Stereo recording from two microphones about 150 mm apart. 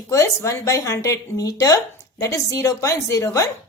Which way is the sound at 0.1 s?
20° left (ahead or behind).